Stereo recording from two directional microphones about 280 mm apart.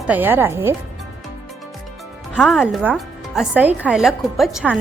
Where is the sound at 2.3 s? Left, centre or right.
Centre.